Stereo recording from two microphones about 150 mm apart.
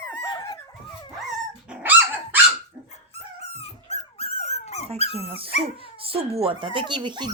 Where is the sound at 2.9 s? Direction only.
45° left (ahead or behind).